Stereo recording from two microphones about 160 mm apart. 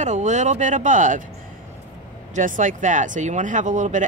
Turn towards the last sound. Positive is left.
turn(degrees=-50)  # may be behind; listen again after turning